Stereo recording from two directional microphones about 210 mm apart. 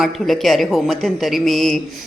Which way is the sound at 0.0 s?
Centre (ahead or behind).